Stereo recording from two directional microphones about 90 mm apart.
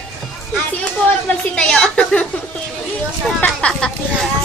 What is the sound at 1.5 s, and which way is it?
Speech, 10° left (ahead or behind).